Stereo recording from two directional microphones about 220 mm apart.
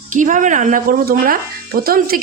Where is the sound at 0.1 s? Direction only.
35° right (ahead or behind).